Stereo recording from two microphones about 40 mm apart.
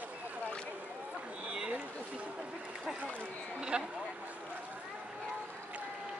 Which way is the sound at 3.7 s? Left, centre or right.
Right.